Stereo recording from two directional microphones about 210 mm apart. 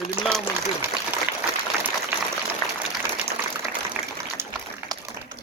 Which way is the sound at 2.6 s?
15° left (ahead or behind).